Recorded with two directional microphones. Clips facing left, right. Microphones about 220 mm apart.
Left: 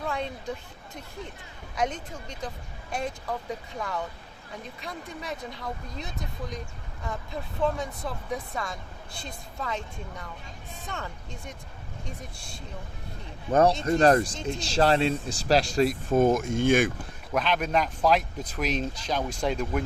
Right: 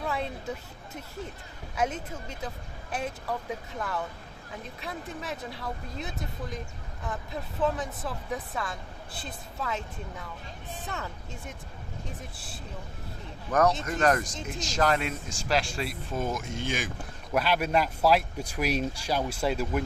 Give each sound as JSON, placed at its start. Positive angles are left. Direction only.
{"t": 0.0, "sound": "speech", "side_deg": -5}
{"t": 1.7, "sound": "speech", "side_deg": -5}
{"t": 13.5, "sound": "speech", "side_deg": 30}
{"t": 17.3, "sound": "speech", "side_deg": -5}